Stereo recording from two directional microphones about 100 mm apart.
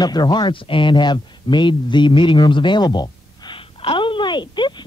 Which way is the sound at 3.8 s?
60° left (ahead or behind).